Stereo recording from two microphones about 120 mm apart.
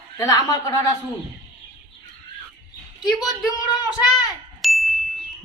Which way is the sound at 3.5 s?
30° left (ahead or behind).